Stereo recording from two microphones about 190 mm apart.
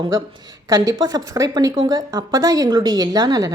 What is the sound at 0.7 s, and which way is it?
Speech, 20° right (ahead or behind).